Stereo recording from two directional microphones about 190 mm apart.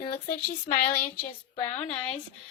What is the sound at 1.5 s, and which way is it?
Speech, 35° left (ahead or behind).